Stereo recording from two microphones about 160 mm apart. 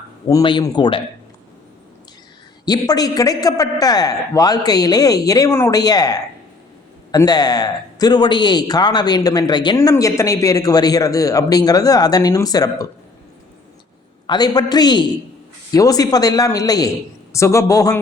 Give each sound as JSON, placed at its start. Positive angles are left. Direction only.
{"t": 0.3, "sound": "speech", "side_deg": 25}
{"t": 2.6, "sound": "speech", "side_deg": 25}
{"t": 14.3, "sound": "speech", "side_deg": 25}